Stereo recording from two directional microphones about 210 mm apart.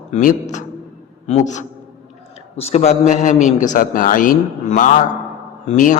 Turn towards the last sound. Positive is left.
turn(degrees=40)  # may be behind; listen again after turning